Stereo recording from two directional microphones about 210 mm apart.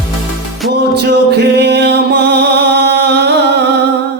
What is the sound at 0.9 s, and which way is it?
Music, 55° right (ahead or behind).